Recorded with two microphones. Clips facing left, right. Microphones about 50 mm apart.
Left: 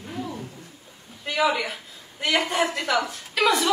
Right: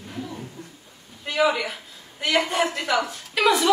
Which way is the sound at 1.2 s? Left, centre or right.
Centre.